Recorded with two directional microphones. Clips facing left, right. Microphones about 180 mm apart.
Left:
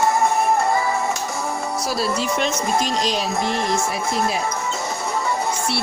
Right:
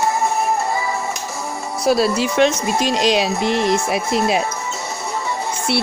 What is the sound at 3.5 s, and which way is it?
Music, 75° right (ahead or behind).